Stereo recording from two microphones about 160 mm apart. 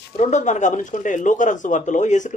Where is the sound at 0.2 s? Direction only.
50° left (ahead or behind).